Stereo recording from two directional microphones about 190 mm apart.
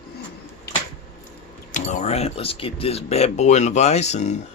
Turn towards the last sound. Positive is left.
turn(degrees=35)  # may be behind; listen again after turning